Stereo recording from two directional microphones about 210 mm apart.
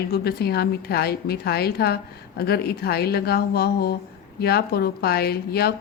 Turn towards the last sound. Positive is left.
turn(degrees=50)  # may be behind; listen again after turning